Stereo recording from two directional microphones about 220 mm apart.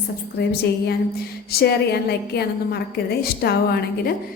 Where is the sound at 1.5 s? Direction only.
45° left (ahead or behind).